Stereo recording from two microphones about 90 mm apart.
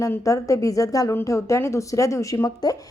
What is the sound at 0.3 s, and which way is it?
A woman's voice, 35° left (ahead or behind).